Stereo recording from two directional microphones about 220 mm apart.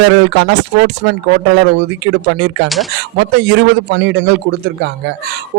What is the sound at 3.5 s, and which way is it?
Speech, 55° right (ahead or behind).